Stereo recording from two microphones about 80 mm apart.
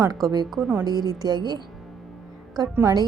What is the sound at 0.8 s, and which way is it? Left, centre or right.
Speech, right.